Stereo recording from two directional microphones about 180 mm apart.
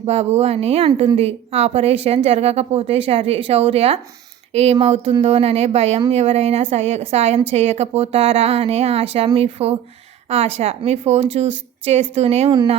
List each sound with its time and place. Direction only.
0.0 s speech: 35° right (ahead or behind)